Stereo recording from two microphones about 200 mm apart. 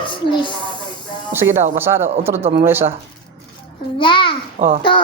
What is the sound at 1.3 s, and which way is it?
Speech, 10° right (ahead or behind).